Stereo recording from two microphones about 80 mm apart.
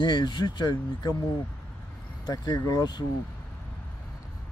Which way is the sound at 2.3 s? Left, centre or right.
Left.